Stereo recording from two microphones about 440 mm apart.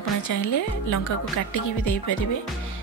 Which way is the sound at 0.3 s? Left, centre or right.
Left.